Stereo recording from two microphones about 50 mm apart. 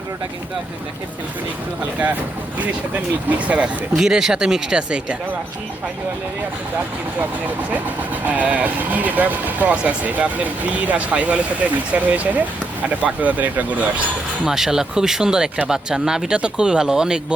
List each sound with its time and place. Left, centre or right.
2.6 s speech: right
3.9 s speech: centre
7.7 s speech: right
14.4 s speech: centre